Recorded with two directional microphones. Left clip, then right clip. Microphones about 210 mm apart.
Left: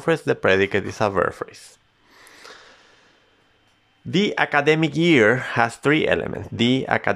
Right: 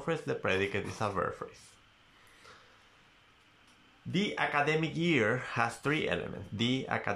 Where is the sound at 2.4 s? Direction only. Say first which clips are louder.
Left 12 dB; 45° left (ahead or behind).